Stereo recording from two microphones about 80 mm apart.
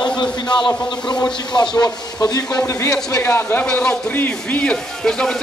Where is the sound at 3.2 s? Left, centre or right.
Left.